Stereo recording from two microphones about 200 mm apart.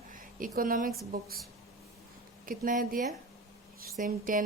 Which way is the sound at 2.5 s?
45° right (ahead or behind).